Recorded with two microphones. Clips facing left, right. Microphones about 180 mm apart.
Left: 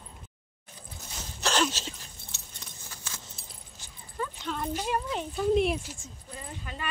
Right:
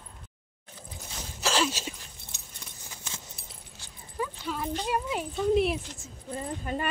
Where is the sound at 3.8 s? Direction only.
10° right (ahead or behind).